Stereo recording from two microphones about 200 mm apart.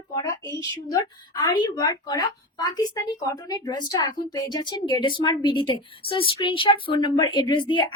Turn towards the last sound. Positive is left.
turn(degrees=25)  # may be behind; listen again after turning